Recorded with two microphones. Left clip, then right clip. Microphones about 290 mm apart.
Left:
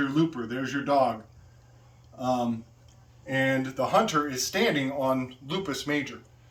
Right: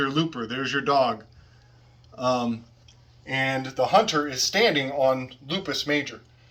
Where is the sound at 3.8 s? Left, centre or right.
Centre.